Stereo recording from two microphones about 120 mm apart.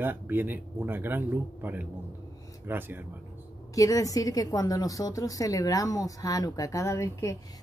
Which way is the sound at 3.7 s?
30° left (ahead or behind).